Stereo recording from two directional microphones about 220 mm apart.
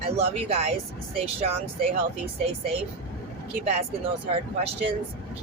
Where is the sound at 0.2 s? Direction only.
25° right (ahead or behind).